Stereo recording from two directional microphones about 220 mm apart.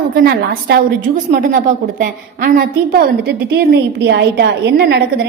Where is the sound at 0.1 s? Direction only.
40° right (ahead or behind).